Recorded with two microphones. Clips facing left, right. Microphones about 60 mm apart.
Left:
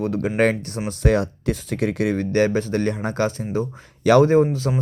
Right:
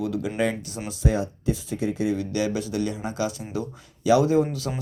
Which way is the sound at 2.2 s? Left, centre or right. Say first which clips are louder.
Left 7 dB; left.